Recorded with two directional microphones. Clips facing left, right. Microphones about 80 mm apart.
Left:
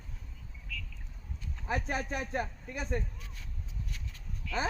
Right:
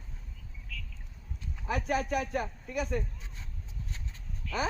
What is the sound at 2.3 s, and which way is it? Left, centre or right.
Speech, left.